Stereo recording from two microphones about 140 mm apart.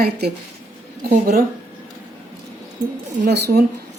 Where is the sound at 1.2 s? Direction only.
90° right.